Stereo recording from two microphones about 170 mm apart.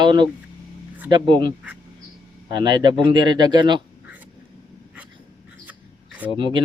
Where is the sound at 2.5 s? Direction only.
25° right (ahead or behind).